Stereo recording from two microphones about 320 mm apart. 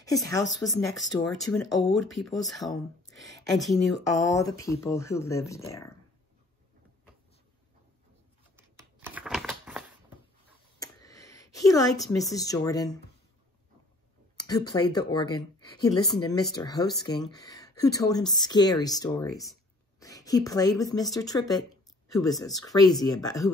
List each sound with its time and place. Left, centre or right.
0.0 s speech: centre
4.5 s speech: centre
8.5 s a sound: centre
10.8 s a woman's voice: centre
14.3 s a woman's voice: centre
22.3 s speech: centre
22.7 s speech: centre